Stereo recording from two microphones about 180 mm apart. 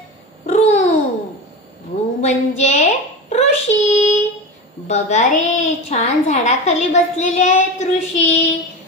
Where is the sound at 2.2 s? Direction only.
40° left (ahead or behind).